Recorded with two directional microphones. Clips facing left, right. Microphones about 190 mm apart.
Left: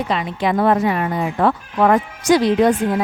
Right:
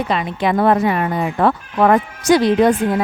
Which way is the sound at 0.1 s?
60° right (ahead or behind).